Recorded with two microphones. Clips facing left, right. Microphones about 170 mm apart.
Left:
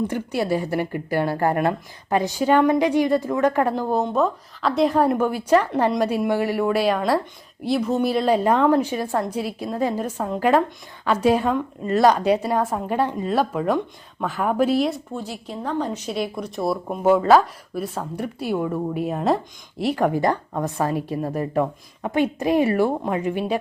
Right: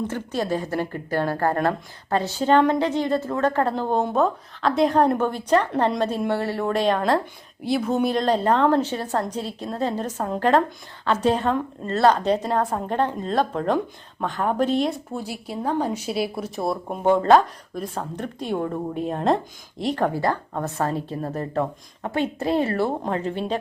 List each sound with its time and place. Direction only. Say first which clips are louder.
0.1 s a woman's voice: left 2 dB; 10° left (ahead or behind)
15.1 s a woman's voice: even; 10° right (ahead or behind)
20.1 s a woman's voice: left 3 dB; 15° left (ahead or behind)